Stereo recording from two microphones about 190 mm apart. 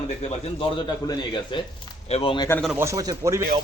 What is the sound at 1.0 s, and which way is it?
Speech, 25° left (ahead or behind).